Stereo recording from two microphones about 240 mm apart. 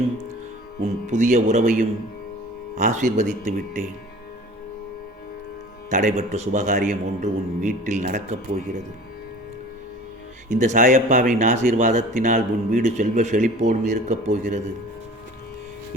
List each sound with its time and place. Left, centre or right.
1.0 s speech: right
5.9 s speech: right
10.5 s speech: right